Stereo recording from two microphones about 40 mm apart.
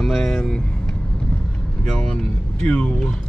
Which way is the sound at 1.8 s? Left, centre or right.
Centre.